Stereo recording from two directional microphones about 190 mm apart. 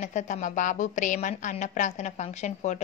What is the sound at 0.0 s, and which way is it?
A woman's voice, 40° left (ahead or behind).